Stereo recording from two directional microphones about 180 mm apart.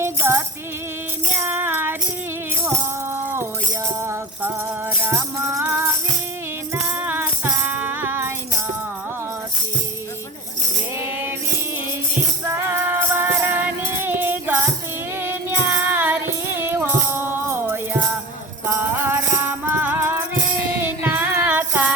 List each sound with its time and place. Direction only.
0.0 s music: 15° right (ahead or behind)
3.1 s music: 15° right (ahead or behind)
6.7 s music: 10° right (ahead or behind)
12.5 s music: 15° right (ahead or behind)